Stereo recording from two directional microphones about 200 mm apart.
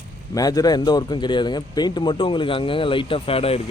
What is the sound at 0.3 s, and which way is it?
Speech, 20° left (ahead or behind).